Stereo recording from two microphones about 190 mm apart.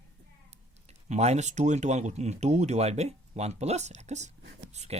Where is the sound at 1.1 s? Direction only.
35° right (ahead or behind).